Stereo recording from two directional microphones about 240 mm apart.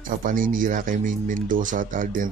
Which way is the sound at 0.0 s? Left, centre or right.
Right.